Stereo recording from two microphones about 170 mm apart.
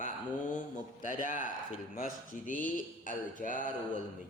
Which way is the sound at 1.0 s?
50° left (ahead or behind).